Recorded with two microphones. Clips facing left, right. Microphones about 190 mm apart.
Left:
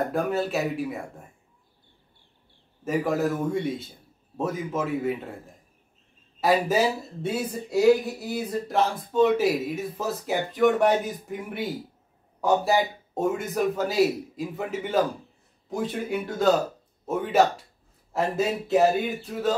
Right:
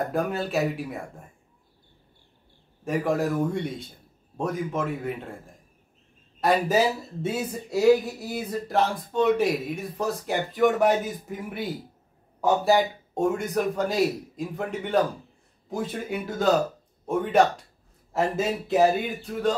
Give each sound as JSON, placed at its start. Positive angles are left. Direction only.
{"t": 0.1, "sound": "speech", "side_deg": 0}
{"t": 2.8, "sound": "speech", "side_deg": 0}
{"t": 6.4, "sound": "speech", "side_deg": 0}